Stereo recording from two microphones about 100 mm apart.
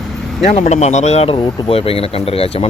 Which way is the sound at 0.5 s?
90° left.